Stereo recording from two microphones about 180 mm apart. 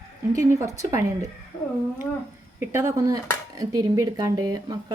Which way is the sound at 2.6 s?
15° right (ahead or behind).